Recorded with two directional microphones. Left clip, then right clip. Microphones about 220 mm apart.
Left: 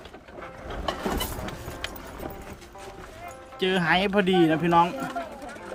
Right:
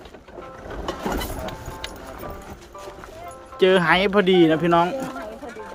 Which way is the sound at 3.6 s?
10° right (ahead or behind).